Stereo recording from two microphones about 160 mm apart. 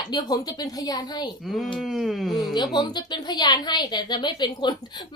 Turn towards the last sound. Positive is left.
turn(degrees=25)  # may be behind; listen again after turning